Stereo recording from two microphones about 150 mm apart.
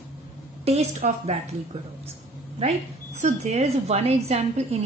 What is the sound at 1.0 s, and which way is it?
Speech, 55° right (ahead or behind).